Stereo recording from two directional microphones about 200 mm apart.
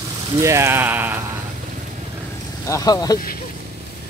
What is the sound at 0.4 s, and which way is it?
Speech, 15° right (ahead or behind).